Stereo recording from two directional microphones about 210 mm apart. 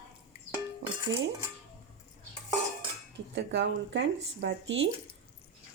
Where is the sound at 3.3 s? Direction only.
60° right (ahead or behind).